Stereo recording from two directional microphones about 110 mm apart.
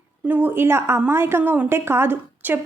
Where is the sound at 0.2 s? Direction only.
15° right (ahead or behind).